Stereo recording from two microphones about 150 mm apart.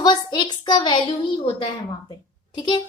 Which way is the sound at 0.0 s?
30° left (ahead or behind).